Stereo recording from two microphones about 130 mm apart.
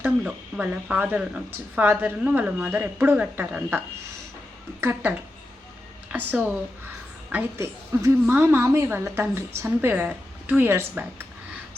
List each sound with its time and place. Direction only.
0.0 s a woman's voice: 10° right (ahead or behind)